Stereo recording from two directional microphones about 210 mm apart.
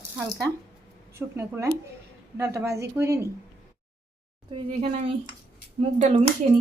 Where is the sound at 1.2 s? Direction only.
10° right (ahead or behind).